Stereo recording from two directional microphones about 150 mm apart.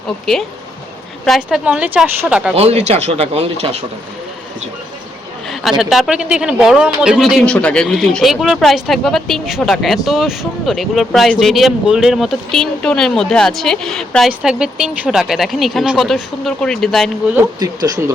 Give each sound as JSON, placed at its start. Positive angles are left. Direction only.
{"t": 1.2, "sound": "speech", "side_deg": 0}
{"t": 2.6, "sound": "speech", "side_deg": -45}
{"t": 5.8, "sound": "speech", "side_deg": -5}
{"t": 17.6, "sound": "speech", "side_deg": -25}